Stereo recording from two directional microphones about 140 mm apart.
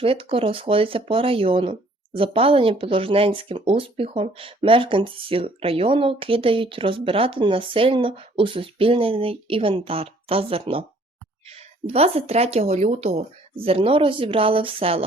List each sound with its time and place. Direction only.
0.0 s speech: 40° right (ahead or behind)